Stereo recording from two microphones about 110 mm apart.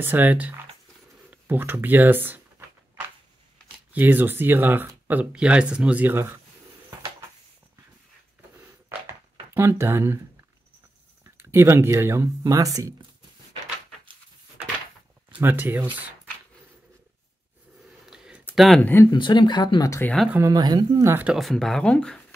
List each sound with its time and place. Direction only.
0.0 s speech: 15° right (ahead or behind)
3.9 s speech: 15° right (ahead or behind)
9.5 s speech: 20° right (ahead or behind)
11.2 s speech: 25° right (ahead or behind)
15.3 s speech: 15° right (ahead or behind)
18.0 s a sound: 5° right (ahead or behind)
18.8 s speech: 15° left (ahead or behind)
19.1 s speech: 45° left (ahead or behind)
20.4 s speech: 40° right (ahead or behind)
21.0 s speech: 20° right (ahead or behind)
21.3 s speech: centre (ahead or behind)